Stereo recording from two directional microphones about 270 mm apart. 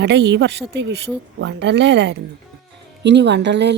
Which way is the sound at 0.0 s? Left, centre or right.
Right.